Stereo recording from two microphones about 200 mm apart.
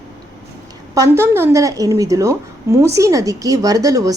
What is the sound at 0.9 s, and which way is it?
A woman's voice, 15° right (ahead or behind).